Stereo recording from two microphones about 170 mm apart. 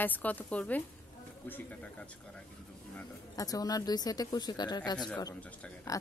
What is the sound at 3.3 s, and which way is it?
Speech, 20° left (ahead or behind).